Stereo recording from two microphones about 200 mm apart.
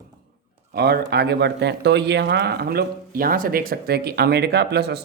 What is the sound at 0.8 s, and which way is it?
Speech, 55° right (ahead or behind).